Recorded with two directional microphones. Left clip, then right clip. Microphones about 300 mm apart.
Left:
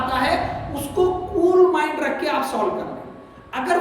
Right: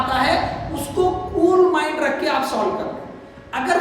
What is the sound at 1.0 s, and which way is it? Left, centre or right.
A woman's voice, centre.